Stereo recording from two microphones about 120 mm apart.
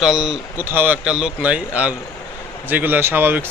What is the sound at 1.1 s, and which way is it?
Speech, 5° right (ahead or behind).